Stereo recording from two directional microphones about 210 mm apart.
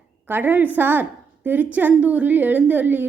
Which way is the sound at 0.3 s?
10° right (ahead or behind).